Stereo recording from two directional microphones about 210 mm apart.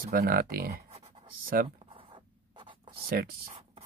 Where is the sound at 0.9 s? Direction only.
30° right (ahead or behind).